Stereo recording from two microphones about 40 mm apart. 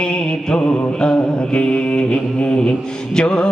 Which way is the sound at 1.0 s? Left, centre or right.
Left.